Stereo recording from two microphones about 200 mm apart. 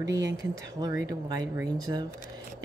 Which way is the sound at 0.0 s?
65° right (ahead or behind).